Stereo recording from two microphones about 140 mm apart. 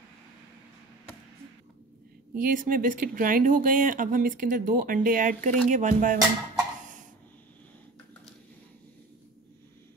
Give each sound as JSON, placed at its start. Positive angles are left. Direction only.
{"t": 2.3, "sound": "speech", "side_deg": -70}
{"t": 5.7, "sound": "music", "side_deg": -60}